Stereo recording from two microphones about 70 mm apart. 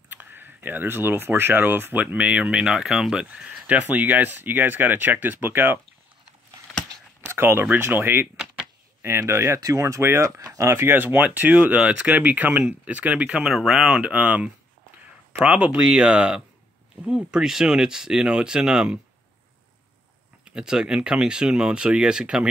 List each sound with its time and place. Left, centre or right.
0.1 s speech: right
7.2 s a sound: right
7.7 s speech: right
9.6 s speech: right
10.7 s speech: right; by 13.5 s centre
13.5 s speech: centre
20.4 s speech: centre